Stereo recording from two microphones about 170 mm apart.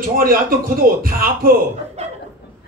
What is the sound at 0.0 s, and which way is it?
A man's voice, 60° right (ahead or behind).